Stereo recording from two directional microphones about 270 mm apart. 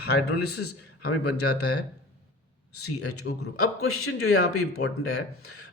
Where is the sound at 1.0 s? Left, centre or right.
Left.